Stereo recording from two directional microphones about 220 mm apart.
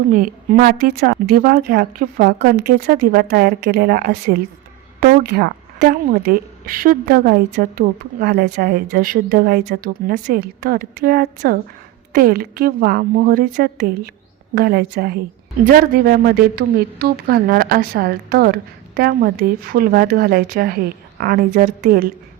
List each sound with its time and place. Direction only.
0.1 s a woman's voice: 40° right (ahead or behind)